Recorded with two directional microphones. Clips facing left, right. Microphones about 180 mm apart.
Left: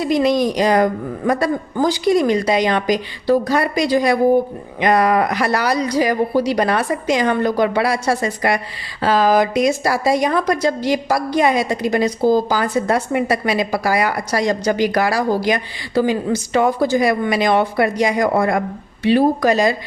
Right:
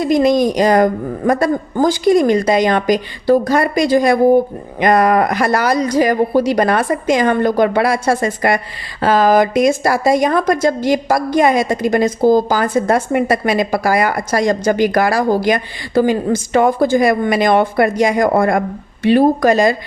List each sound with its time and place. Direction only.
0.0 s speech: 45° right (ahead or behind)